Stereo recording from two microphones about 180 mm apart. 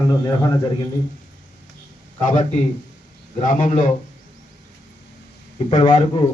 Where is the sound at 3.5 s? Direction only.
45° left (ahead or behind).